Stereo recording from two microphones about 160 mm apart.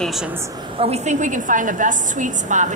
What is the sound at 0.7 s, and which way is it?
A woman's voice, 40° right (ahead or behind).